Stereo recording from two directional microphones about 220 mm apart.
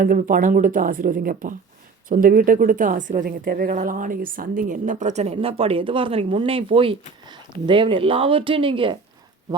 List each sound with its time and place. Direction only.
0.0 s a woman's voice: 40° right (ahead or behind); by 9.0 s 25° right (ahead or behind)